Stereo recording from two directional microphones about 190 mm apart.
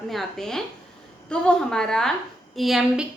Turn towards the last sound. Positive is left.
turn(degrees=0)  # may be behind; listen again after turning